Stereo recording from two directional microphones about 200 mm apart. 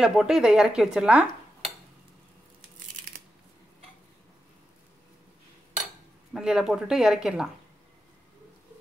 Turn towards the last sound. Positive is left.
turn(degrees=-5)  # may be behind; listen again after turning